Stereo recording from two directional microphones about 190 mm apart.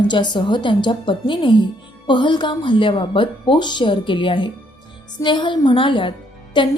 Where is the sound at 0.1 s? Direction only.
25° left (ahead or behind).